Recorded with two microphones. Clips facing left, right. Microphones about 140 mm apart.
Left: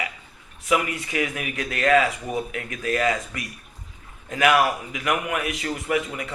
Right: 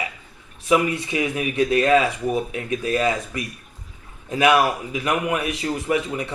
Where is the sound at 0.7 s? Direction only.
25° right (ahead or behind).